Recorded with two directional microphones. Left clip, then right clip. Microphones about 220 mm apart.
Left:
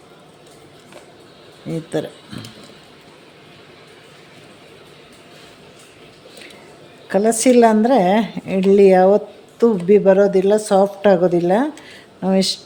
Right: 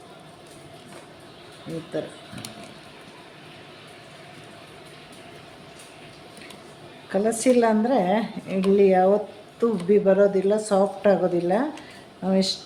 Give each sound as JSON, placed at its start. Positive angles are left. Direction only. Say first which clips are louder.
{"t": 1.9, "sound": "speech", "louder": "left 7 dB", "side_deg": 45}
{"t": 7.1, "sound": "a woman's voice", "louder": "left 6 dB", "side_deg": 40}